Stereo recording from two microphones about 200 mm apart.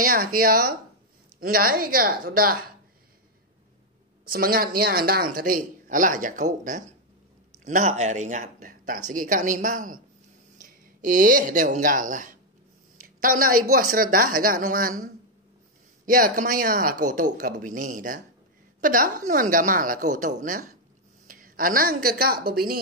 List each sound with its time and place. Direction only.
0.0 s speech: 45° right (ahead or behind)
4.3 s a woman's voice: 45° right (ahead or behind)
16.1 s a woman's voice: 45° right (ahead or behind)